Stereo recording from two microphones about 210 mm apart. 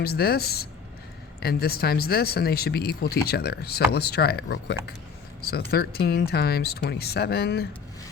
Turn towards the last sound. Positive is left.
turn(degrees=50)  # may be behind; listen again after turning